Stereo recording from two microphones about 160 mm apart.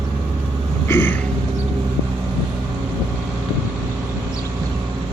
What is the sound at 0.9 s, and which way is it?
Speech, 15° left (ahead or behind).